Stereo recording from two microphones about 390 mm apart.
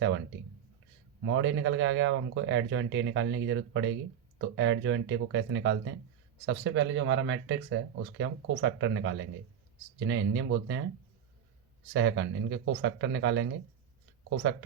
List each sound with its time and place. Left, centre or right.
1.2 s speech: right
11.9 s speech: right